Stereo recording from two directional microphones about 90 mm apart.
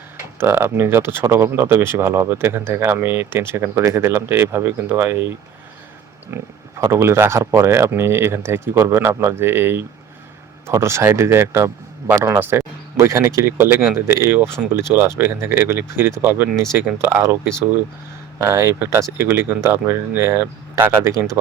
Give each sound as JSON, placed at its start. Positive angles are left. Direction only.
{"t": 0.3, "sound": "a man's voice", "side_deg": -25}
{"t": 18.4, "sound": "speech", "side_deg": -30}